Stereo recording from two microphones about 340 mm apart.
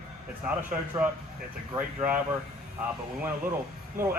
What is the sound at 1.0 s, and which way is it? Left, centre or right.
Speech, centre.